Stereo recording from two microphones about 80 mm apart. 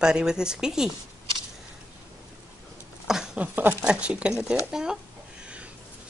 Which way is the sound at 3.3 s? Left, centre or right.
Right.